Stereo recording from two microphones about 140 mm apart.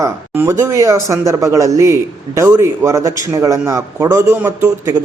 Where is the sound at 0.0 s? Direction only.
20° right (ahead or behind).